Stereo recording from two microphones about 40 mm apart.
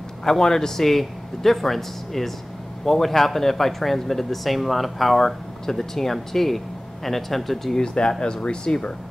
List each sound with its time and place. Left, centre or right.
0.2 s speech: centre
7.8 s speech: centre